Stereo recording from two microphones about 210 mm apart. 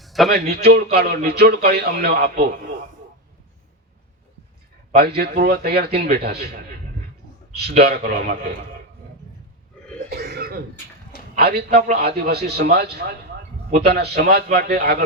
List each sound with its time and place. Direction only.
0.0 s a sound: centre (ahead or behind)
0.3 s a man's voice: 50° right (ahead or behind)
4.9 s a man's voice: 50° right (ahead or behind)
7.8 s a man's voice: 50° right (ahead or behind)
10.1 s cough: 50° right (ahead or behind)
11.3 s a man's voice: 50° right (ahead or behind)